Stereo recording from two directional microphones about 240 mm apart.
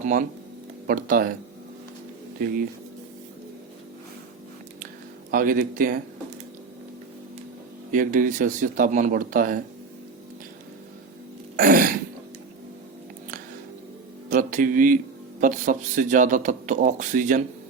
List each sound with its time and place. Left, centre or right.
0.0 s speech: right
5.3 s speech: right
7.9 s speech: right
11.5 s throat clearing: right
14.3 s music: right
15.4 s speech: right